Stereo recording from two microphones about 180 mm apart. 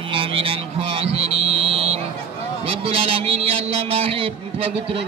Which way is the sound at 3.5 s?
30° right (ahead or behind).